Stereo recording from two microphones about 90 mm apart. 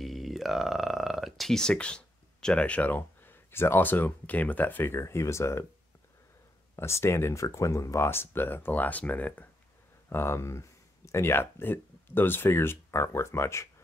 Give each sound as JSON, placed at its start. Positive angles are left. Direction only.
{"t": 0.0, "sound": "speech", "side_deg": 0}
{"t": 6.8, "sound": "speech", "side_deg": 30}
{"t": 10.0, "sound": "speech", "side_deg": 30}